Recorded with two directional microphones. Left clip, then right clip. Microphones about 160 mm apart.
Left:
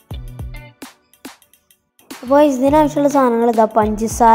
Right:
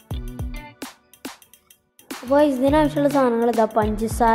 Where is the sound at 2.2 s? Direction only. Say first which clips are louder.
Left 5 dB; 15° left (ahead or behind).